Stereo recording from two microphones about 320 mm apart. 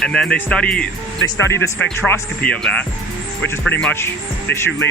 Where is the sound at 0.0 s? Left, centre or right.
Centre.